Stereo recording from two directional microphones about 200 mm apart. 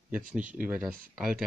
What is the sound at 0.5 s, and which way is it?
Speech, 5° right (ahead or behind).